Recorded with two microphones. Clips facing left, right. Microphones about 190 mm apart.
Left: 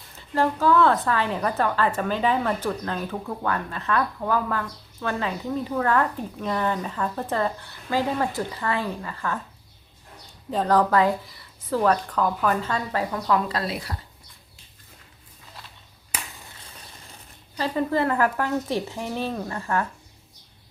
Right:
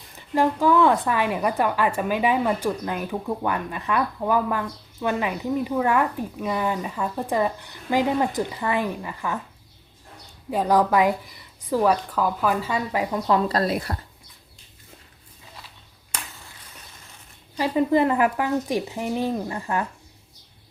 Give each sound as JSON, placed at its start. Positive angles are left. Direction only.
{"t": 0.2, "sound": "a woman's voice", "side_deg": -15}
{"t": 10.5, "sound": "a woman's voice", "side_deg": -10}
{"t": 13.5, "sound": "speech", "side_deg": -45}
{"t": 16.1, "sound": "ping", "side_deg": 10}
{"t": 17.6, "sound": "a woman's voice", "side_deg": -15}